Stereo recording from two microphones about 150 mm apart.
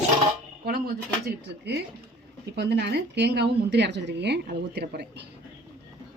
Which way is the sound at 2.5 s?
90° right.